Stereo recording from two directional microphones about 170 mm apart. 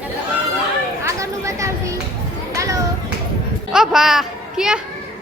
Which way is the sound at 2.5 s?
20° right (ahead or behind).